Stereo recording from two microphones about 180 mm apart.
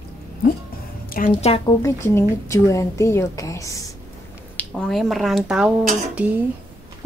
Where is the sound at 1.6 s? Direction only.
15° left (ahead or behind).